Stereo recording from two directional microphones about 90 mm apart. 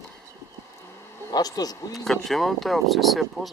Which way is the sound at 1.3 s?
45° left (ahead or behind).